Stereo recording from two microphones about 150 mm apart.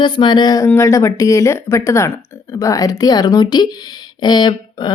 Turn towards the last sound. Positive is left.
turn(degrees=30)  # may be behind; listen again after turning